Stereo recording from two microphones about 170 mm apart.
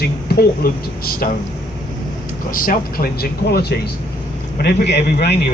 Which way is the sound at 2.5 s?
55° left (ahead or behind).